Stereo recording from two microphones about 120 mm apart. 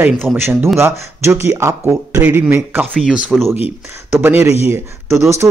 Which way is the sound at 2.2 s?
10° right (ahead or behind).